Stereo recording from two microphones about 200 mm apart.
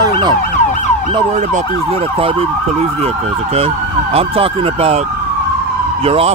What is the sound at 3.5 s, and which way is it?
Emergency vehicle, 30° right (ahead or behind).